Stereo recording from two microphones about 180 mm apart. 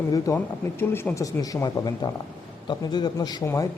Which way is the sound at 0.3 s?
20° left (ahead or behind).